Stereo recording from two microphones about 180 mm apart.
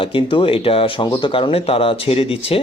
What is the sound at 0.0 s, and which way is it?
Speech, 30° left (ahead or behind).